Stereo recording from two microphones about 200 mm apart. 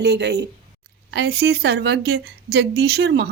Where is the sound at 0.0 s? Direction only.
55° right (ahead or behind).